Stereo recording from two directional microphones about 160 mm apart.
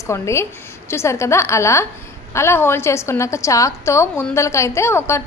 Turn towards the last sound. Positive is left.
turn(degrees=15)  # may be behind; listen again after turning